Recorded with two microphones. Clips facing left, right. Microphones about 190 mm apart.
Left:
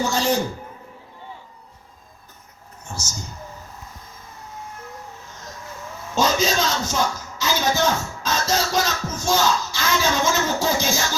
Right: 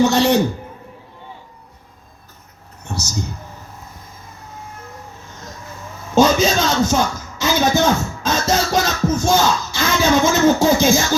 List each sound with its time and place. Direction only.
0.0 s a man's voice: 70° right (ahead or behind)
2.8 s speech: 65° right (ahead or behind)
6.1 s a sound: 55° right (ahead or behind)